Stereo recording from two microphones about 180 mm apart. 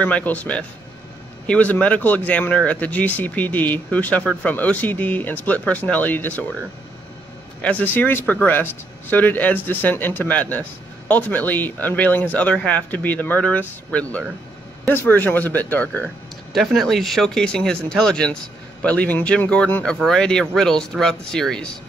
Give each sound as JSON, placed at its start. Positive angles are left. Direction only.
{"t": 0.0, "sound": "speech", "side_deg": 10}
{"t": 7.6, "sound": "speech", "side_deg": 10}